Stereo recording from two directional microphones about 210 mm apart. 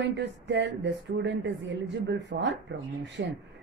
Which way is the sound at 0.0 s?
55° right (ahead or behind).